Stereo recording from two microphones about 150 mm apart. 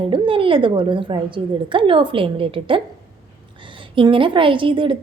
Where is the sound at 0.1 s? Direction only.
35° right (ahead or behind).